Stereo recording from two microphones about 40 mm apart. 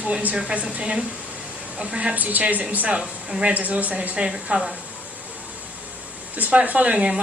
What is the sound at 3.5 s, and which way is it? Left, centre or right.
Speech, right.